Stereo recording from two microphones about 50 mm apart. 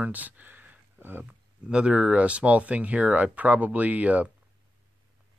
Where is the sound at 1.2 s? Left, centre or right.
Right.